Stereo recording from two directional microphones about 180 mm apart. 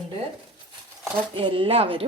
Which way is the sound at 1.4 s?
30° right (ahead or behind).